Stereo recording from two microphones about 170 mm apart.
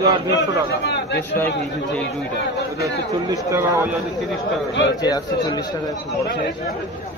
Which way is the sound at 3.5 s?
15° right (ahead or behind).